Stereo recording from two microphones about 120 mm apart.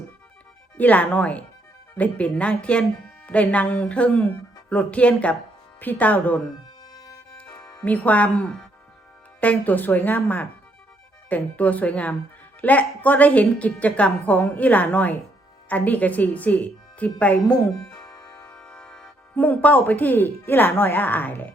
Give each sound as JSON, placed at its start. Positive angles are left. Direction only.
{"t": 0.8, "sound": "a woman's voice", "side_deg": 15}
{"t": 7.3, "sound": "music", "side_deg": 25}
{"t": 7.9, "sound": "a woman's voice", "side_deg": 15}
{"t": 17.9, "sound": "music", "side_deg": 30}
{"t": 18.7, "sound": "speech", "side_deg": 5}